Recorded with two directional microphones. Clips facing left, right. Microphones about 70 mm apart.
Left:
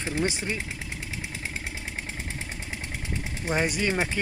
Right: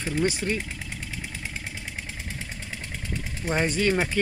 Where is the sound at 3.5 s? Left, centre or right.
Centre.